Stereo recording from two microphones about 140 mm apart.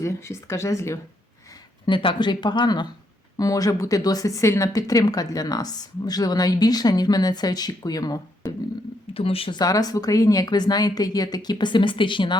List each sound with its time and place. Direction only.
0.0 s speech: 20° left (ahead or behind)
1.9 s speech: 35° left (ahead or behind)
9.1 s speech: 40° left (ahead or behind)
9.6 s speech: 25° left (ahead or behind)